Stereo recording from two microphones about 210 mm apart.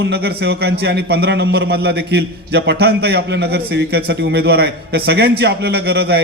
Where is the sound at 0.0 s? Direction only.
50° right (ahead or behind).